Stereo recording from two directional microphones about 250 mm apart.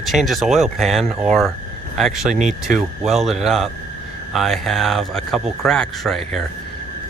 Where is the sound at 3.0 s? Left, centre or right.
Centre.